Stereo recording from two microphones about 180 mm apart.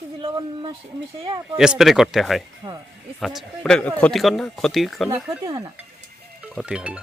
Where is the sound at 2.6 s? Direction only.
25° right (ahead or behind).